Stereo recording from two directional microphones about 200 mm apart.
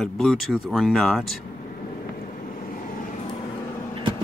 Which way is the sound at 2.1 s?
45° left (ahead or behind).